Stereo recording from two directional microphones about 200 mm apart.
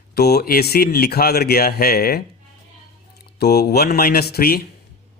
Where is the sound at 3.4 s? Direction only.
55° left (ahead or behind).